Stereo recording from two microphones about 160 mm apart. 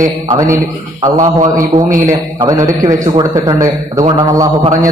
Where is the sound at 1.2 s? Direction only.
55° right (ahead or behind).